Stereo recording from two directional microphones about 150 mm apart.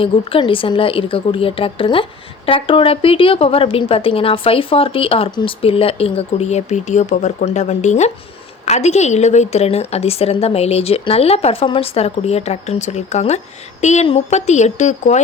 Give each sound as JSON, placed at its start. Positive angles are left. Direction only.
{"t": 0.0, "sound": "a woman's voice", "side_deg": 35}